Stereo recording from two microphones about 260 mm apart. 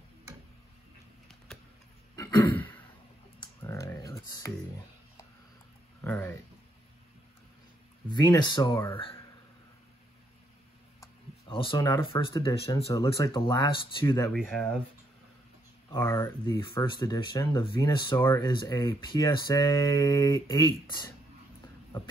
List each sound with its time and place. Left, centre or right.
2.1 s throat clearing: centre
3.3 s computer keyboard: centre
5.9 s a sound: centre
8.1 s speech: centre
11.0 s speech: centre
14.3 s speech: centre
15.9 s speech: centre